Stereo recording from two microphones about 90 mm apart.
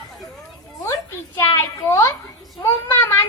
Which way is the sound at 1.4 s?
30° left (ahead or behind).